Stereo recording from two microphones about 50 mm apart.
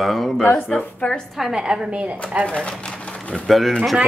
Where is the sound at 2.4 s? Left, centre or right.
Left.